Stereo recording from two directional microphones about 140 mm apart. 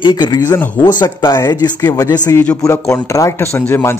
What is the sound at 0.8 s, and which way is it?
A man's voice, 30° left (ahead or behind).